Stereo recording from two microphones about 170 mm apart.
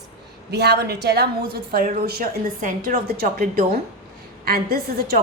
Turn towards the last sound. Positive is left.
turn(degrees=-65)  # may be behind; listen again after turning